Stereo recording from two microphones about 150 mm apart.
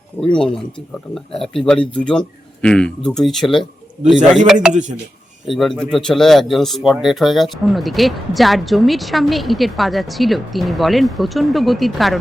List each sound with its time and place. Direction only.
0.2 s speech: 5° left (ahead or behind)
4.7 s speech: 55° right (ahead or behind)
5.5 s speech: centre (ahead or behind)